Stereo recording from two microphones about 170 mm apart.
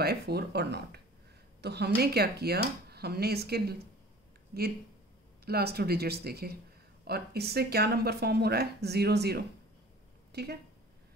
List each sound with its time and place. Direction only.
0.0 s speech: 70° right (ahead or behind)
5.4 s speech: 70° right (ahead or behind)